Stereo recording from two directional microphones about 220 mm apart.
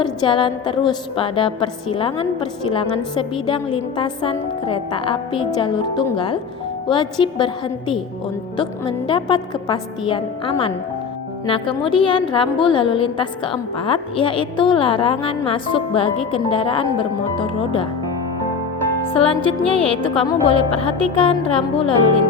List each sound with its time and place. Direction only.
0.0 s a woman's voice: 25° left (ahead or behind)
8.5 s a woman's voice: 25° left (ahead or behind)
19.0 s a woman's voice: 25° left (ahead or behind)